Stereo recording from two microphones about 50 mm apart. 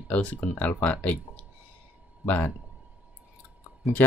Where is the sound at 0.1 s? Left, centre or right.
Left.